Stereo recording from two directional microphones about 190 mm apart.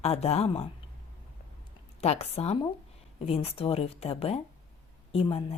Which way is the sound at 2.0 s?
35° left (ahead or behind).